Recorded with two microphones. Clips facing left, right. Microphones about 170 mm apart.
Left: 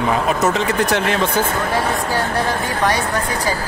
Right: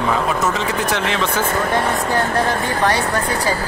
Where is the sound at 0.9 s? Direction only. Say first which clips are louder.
Left 2 dB; 50° left (ahead or behind).